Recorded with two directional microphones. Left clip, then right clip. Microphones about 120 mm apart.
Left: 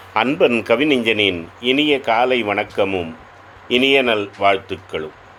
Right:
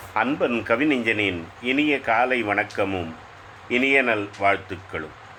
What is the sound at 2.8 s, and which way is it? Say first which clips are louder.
Speech: left 6 dB; 30° left (ahead or behind).